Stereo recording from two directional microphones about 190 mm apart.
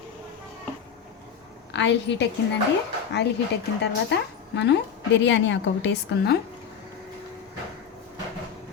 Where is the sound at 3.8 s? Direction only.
65° left (ahead or behind).